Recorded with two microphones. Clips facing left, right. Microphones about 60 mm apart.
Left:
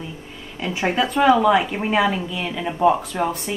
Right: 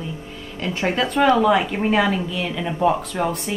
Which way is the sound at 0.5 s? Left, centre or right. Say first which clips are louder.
Left 1 dB; centre.